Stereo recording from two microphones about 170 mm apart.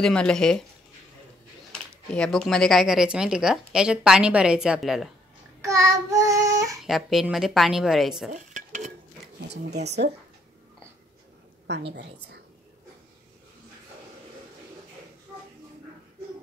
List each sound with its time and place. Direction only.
0.0 s speech: 5° left (ahead or behind)
1.7 s speech: 5° left (ahead or behind)
5.6 s child singing: 20° right (ahead or behind)
6.9 s speech: centre (ahead or behind)
8.3 s dishes: 45° right (ahead or behind)
9.4 s speech: 70° right (ahead or behind)
11.9 s a woman's voice: 75° right (ahead or behind)